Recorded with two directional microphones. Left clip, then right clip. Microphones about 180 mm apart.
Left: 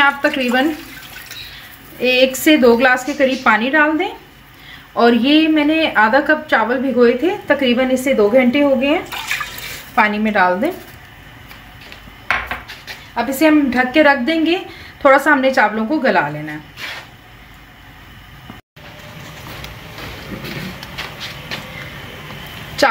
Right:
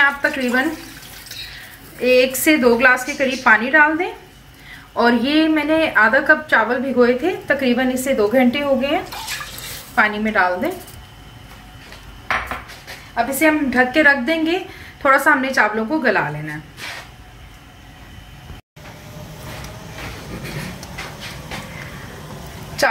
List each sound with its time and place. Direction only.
0.0 s speech: 65° left (ahead or behind)
2.0 s speech: 65° left (ahead or behind)
13.1 s speech: 65° left (ahead or behind)